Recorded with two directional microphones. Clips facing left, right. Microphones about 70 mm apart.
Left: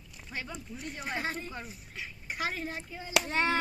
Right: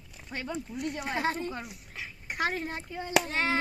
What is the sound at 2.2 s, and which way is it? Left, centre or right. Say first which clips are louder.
Speech: right 4 dB; right.